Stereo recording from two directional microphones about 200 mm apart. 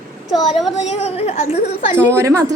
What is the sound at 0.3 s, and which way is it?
Speech, centre (ahead or behind).